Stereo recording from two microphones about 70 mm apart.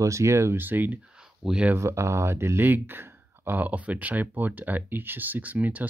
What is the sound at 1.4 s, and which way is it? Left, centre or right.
Speech, centre.